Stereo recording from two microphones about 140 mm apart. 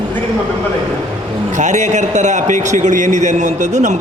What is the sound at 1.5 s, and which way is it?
A man's voice, 60° right (ahead or behind).